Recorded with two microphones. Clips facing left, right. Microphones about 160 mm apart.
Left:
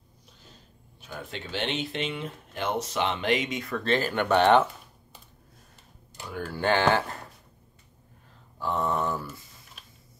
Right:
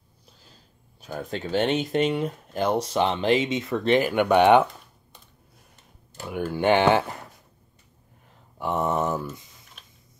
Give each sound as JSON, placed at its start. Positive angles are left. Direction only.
{"t": 1.0, "sound": "speech", "side_deg": -40}
{"t": 6.2, "sound": "speech", "side_deg": -20}
{"t": 8.5, "sound": "speech", "side_deg": -20}
{"t": 9.8, "sound": "a sound", "side_deg": 0}